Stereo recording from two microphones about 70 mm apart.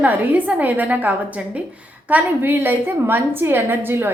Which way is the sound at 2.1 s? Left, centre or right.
Right.